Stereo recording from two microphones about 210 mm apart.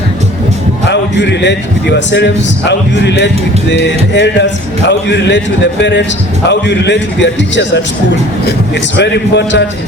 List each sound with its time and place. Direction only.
0.9 s a man's voice: 55° left (ahead or behind)
6.5 s a man's voice: 55° left (ahead or behind)
9.0 s a man's voice: 55° left (ahead or behind)